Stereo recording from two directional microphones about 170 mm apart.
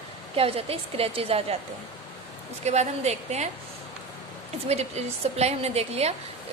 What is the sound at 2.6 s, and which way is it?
Speech, 40° right (ahead or behind).